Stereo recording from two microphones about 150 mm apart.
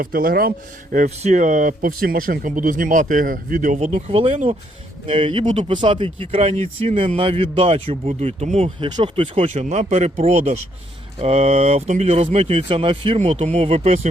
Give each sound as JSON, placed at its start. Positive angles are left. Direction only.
{"t": 0.0, "sound": "speech", "side_deg": -70}
{"t": 0.9, "sound": "speech", "side_deg": -50}
{"t": 9.5, "sound": "speech", "side_deg": -50}